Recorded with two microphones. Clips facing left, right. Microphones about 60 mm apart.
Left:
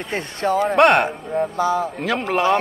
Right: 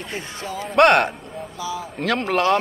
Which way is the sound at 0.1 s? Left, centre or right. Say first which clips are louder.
Left 11 dB; left.